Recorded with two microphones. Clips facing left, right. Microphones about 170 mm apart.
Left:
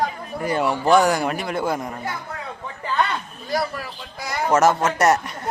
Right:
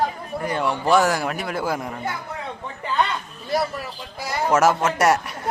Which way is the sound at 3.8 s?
25° right (ahead or behind).